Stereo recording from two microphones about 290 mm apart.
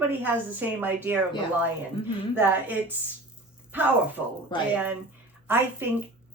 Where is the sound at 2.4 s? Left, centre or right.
Centre.